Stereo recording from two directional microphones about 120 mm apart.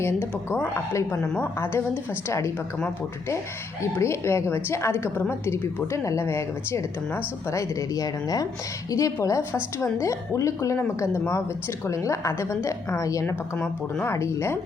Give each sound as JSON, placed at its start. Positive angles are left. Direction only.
{"t": 0.0, "sound": "a woman's voice", "side_deg": 20}
{"t": 3.9, "sound": "a woman's voice", "side_deg": 20}